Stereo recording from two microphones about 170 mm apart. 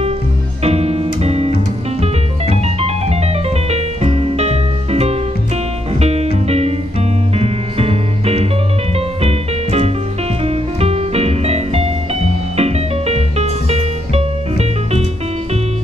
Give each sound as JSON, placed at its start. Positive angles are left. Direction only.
{"t": 0.7, "sound": "music", "side_deg": -35}
{"t": 2.5, "sound": "music", "side_deg": -40}